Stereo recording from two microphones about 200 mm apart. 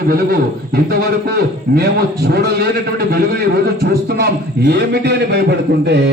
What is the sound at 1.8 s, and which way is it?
Speech, 50° right (ahead or behind).